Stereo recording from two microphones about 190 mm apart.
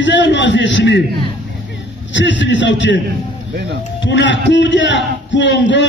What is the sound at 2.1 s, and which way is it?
Speech, 70° left (ahead or behind).